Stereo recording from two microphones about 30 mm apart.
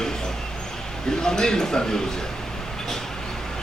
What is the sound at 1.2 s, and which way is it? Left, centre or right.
Speech, left.